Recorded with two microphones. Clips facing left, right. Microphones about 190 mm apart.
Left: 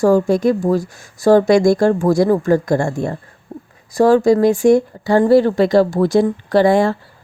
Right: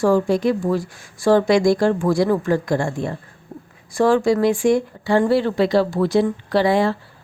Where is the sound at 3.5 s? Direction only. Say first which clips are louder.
Left 4 dB; 30° left (ahead or behind).